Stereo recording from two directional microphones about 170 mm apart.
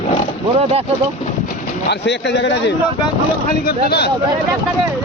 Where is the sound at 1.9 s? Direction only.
90° left.